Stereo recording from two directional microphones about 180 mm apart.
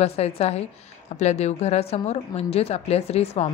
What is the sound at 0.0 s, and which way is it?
Speech, 35° left (ahead or behind).